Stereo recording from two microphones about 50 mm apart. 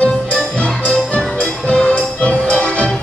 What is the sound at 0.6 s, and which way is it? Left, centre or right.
Music, left.